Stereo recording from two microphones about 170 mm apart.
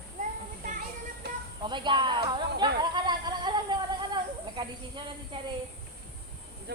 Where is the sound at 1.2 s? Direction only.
75° right (ahead or behind).